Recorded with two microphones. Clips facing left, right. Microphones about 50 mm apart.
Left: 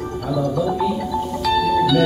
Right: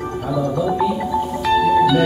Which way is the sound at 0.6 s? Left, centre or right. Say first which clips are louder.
Right 1 dB; centre.